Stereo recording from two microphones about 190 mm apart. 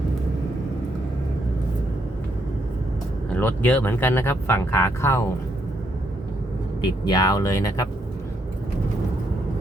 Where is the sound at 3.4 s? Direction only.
10° left (ahead or behind).